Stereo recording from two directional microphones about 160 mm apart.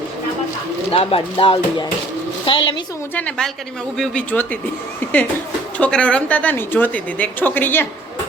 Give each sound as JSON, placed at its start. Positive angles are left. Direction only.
{"t": 0.9, "sound": "speech", "side_deg": 35}
{"t": 3.2, "sound": "speech", "side_deg": 5}
{"t": 5.7, "sound": "a woman's voice", "side_deg": 5}